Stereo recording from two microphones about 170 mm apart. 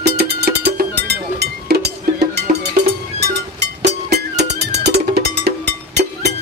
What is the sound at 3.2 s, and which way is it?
Music, 80° right.